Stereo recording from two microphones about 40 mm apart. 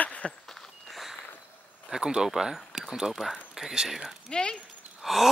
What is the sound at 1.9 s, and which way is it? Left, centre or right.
Speech, centre.